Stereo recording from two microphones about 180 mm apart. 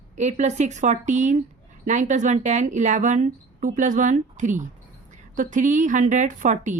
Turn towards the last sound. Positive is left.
turn(degrees=-45)  # may be behind; listen again after turning